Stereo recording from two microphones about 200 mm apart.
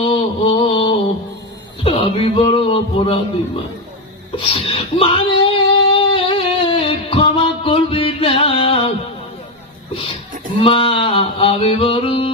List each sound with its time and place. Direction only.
0.0 s music: 25° left (ahead or behind)
1.8 s speech: 30° left (ahead or behind)
4.5 s a sound: 30° left (ahead or behind)
10.6 s music: 25° left (ahead or behind)